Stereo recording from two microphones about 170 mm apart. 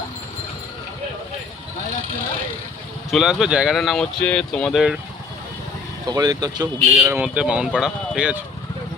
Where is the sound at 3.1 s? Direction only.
5° right (ahead or behind).